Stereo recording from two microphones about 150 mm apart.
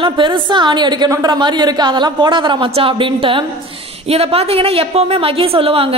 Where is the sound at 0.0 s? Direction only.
35° right (ahead or behind).